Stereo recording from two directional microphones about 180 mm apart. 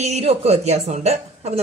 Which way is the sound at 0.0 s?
40° right (ahead or behind).